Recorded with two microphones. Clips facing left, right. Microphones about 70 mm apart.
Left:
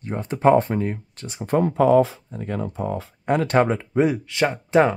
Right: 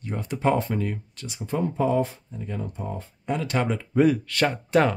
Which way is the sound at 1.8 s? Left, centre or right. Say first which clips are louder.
Left 8 dB; left.